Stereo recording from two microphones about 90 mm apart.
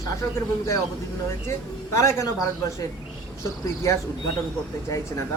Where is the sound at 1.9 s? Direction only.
35° left (ahead or behind).